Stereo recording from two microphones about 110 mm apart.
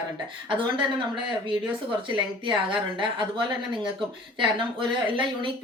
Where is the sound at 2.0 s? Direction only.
50° right (ahead or behind).